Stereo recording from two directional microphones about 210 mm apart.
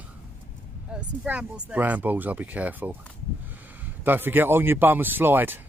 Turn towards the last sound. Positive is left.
turn(degrees=-10)  # may be behind; listen again after turning